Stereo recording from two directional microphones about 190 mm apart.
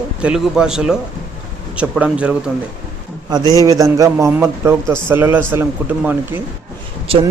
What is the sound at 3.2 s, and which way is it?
A man's voice, 20° right (ahead or behind).